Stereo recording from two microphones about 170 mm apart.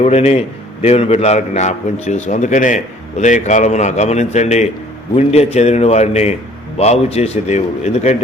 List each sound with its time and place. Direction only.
0.0 s a man's voice: 40° left (ahead or behind)